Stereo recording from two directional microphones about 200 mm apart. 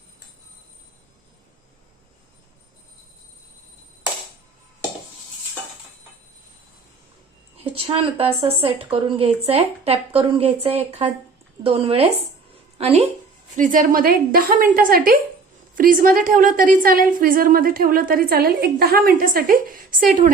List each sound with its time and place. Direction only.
7.6 s a woman's voice: 25° right (ahead or behind)
13.6 s a woman's voice: 40° right (ahead or behind)